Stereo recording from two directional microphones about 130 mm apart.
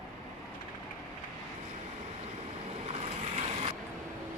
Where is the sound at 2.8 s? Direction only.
55° right (ahead or behind).